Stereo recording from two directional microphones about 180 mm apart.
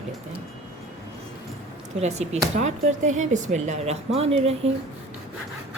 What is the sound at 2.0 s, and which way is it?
Speech, 40° right (ahead or behind).